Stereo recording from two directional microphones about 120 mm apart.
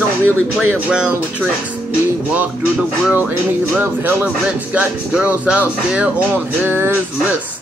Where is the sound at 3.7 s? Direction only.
15° right (ahead or behind).